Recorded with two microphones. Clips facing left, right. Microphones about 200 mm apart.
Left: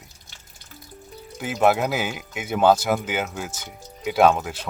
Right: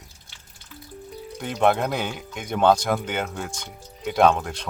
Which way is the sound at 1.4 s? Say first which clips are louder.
Left 1 dB; 5° left (ahead or behind).